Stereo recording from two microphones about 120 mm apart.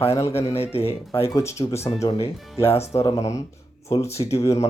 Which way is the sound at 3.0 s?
30° left (ahead or behind).